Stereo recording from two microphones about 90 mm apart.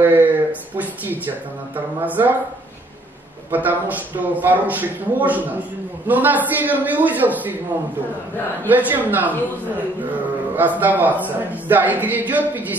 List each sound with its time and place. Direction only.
0.0 s a man's voice: 20° right (ahead or behind)
3.5 s a man's voice: 20° right (ahead or behind)
8.6 s a man's voice: 20° right (ahead or behind)
10.5 s a man's voice: 20° right (ahead or behind)